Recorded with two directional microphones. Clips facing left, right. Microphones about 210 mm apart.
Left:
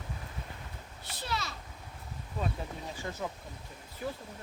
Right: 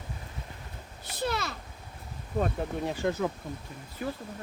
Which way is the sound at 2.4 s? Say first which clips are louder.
Right 7 dB; 70° right (ahead or behind).